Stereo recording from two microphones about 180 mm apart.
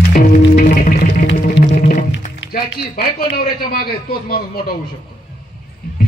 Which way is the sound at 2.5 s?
60° left (ahead or behind).